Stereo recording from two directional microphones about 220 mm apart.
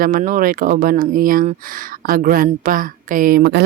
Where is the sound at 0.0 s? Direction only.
40° right (ahead or behind).